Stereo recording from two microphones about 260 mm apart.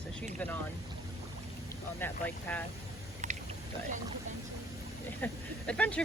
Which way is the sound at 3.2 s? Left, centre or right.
Right.